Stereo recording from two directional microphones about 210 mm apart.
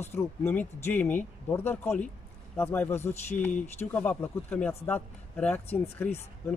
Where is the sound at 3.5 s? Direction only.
35° left (ahead or behind).